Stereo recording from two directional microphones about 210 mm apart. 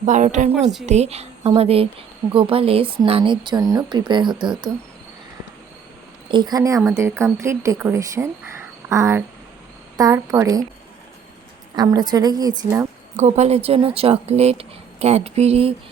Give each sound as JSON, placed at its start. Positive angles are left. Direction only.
{"t": 0.0, "sound": "a woman's voice", "side_deg": -35}
{"t": 6.2, "sound": "speech", "side_deg": -20}
{"t": 11.8, "sound": "speech", "side_deg": -20}
{"t": 13.1, "sound": "speech", "side_deg": -30}